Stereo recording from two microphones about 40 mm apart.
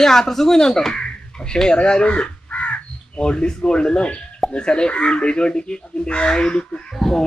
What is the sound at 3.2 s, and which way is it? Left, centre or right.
Speech, left.